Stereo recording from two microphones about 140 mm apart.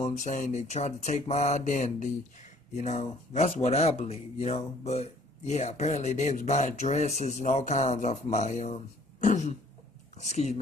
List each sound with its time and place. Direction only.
0.0 s speech: 60° left (ahead or behind)